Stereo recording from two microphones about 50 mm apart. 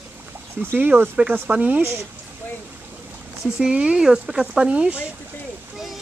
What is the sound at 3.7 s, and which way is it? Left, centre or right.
Speech, right.